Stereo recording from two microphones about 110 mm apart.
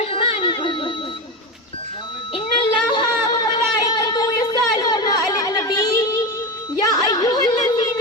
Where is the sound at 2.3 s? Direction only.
45° left (ahead or behind).